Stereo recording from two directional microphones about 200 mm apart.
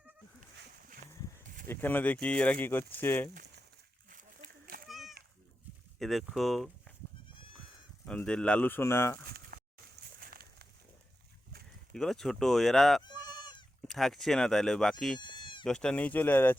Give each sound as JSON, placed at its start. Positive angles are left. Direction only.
{"t": 1.6, "sound": "speech", "side_deg": 10}
{"t": 4.6, "sound": "children playing", "side_deg": -45}
{"t": 4.9, "sound": "a sound", "side_deg": 0}
{"t": 6.0, "sound": "speech", "side_deg": 0}
{"t": 7.3, "sound": "goat", "side_deg": 25}
{"t": 8.0, "sound": "speech", "side_deg": 5}
{"t": 9.5, "sound": "a sound", "side_deg": -50}
{"t": 11.9, "sound": "speech", "side_deg": 0}
{"t": 13.4, "sound": "goat", "side_deg": 20}
{"t": 13.8, "sound": "speech", "side_deg": 0}
{"t": 15.2, "sound": "bleat", "side_deg": 25}
{"t": 15.6, "sound": "speech", "side_deg": 5}